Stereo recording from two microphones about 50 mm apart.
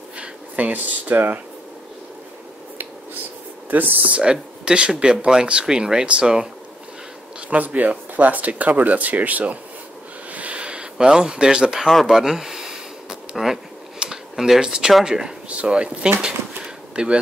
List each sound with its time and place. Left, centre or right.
0.2 s speech: right
3.7 s speech: right
4.1 s speech: centre
7.3 s speech: right
10.3 s a sound: right
11.9 s speech: centre
12.2 s a sound: centre
15.0 s speech: centre
16.2 s a sound: centre